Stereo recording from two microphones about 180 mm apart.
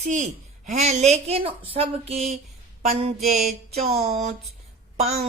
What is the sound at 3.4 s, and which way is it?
A woman's voice, 35° right (ahead or behind).